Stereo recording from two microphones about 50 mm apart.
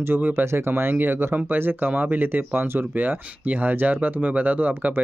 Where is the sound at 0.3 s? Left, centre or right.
Right.